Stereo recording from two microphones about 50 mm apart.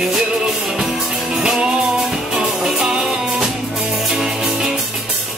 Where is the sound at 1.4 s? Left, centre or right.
Centre.